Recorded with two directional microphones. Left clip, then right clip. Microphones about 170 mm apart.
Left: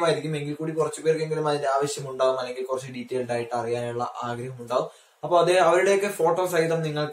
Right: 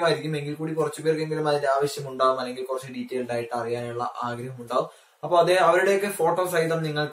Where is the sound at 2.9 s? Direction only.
15° left (ahead or behind).